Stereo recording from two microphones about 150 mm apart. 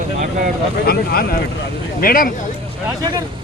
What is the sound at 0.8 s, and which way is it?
Speech, 90° left.